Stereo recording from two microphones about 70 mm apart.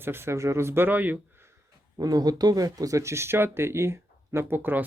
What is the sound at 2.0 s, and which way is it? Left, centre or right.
Speech, right.